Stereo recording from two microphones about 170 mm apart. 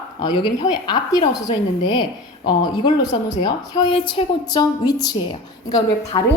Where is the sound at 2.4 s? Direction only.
25° left (ahead or behind).